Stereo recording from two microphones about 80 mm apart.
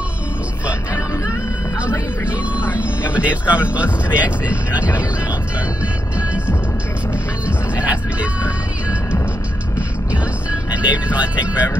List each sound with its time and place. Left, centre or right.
3.1 s speech: centre
6.1 s music: centre
7.4 s vehicle: centre
9.8 s music: centre